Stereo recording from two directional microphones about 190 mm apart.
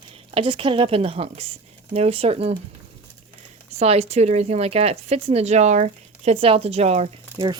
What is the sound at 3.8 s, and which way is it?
A woman's voice, 35° right (ahead or behind).